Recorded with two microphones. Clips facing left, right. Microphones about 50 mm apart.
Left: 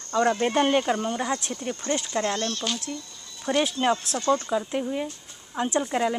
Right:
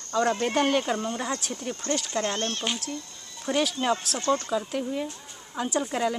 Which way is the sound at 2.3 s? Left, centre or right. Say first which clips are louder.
Left 1 dB; right.